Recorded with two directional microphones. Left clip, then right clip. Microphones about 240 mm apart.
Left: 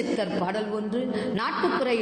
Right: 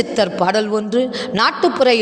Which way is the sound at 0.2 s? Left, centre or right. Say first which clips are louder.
Right 12 dB; right.